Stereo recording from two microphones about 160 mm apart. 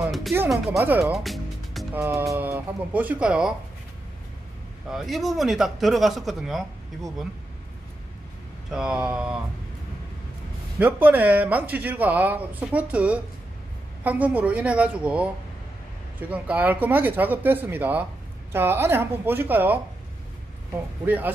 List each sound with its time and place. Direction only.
0.7 s speech: 10° right (ahead or behind)
1.2 s music: centre (ahead or behind)
2.0 s speech: 15° right (ahead or behind)
4.9 s speech: centre (ahead or behind)
8.6 s speech: 5° right (ahead or behind)
10.8 s speech: 10° right (ahead or behind)
21.0 s speech: 10° right (ahead or behind)